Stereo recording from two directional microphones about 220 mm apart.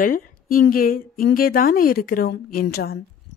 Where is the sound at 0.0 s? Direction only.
40° left (ahead or behind).